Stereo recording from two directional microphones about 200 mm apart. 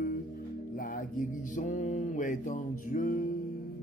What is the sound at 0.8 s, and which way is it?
Mantra, 45° left (ahead or behind).